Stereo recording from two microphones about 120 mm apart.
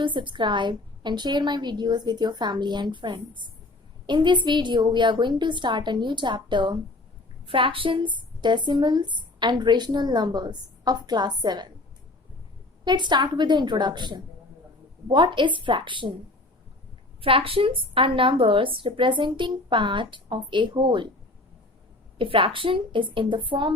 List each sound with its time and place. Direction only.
0.0 s speech: 40° right (ahead or behind)
12.8 s a woman's voice: 40° right (ahead or behind)
17.2 s a woman's voice: 50° right (ahead or behind)
22.2 s a woman's voice: 45° right (ahead or behind)